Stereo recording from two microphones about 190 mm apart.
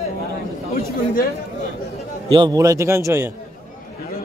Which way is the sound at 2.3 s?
20° right (ahead or behind).